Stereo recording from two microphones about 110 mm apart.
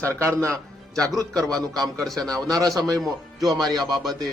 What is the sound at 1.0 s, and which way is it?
A man's voice, 35° right (ahead or behind).